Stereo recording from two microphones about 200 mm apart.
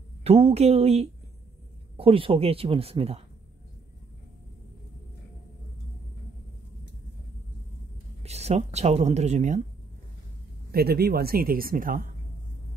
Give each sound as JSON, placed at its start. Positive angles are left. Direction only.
{"t": 0.2, "sound": "speech", "side_deg": -30}
{"t": 8.2, "sound": "speech", "side_deg": -30}
{"t": 10.7, "sound": "speech", "side_deg": -50}